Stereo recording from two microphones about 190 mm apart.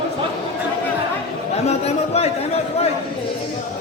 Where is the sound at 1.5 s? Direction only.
35° left (ahead or behind).